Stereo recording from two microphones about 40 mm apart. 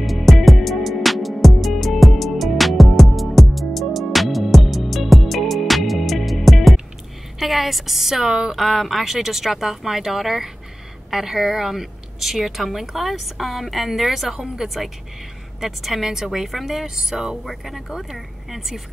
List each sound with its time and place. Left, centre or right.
0.0 s music: centre
7.3 s a woman's voice: centre
8.6 s speech: centre